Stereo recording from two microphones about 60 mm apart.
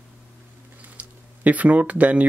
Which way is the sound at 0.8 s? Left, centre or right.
Right.